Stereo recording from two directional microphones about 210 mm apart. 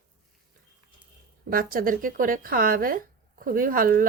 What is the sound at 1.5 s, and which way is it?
A woman's voice, 45° right (ahead or behind).